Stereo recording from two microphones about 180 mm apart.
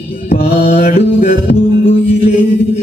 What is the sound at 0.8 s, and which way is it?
Music, 55° left (ahead or behind).